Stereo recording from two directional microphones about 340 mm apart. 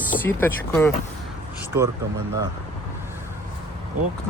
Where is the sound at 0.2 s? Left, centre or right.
Centre.